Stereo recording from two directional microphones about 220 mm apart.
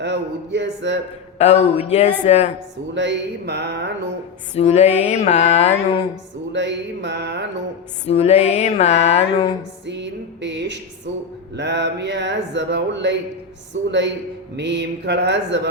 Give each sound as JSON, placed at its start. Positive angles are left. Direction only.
{"t": 0.0, "sound": "speech", "side_deg": -50}
{"t": 1.4, "sound": "a sound", "side_deg": 30}
{"t": 1.9, "sound": "music", "side_deg": 30}
{"t": 2.9, "sound": "speech", "side_deg": -50}
{"t": 4.5, "sound": "music", "side_deg": 30}
{"t": 6.5, "sound": "speech", "side_deg": -55}
{"t": 8.0, "sound": "a sound", "side_deg": 30}
{"t": 9.8, "sound": "speech", "side_deg": -50}